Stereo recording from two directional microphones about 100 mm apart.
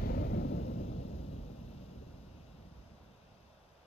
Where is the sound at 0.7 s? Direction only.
90° left.